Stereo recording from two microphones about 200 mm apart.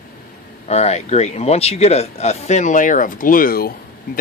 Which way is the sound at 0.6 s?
35° left (ahead or behind).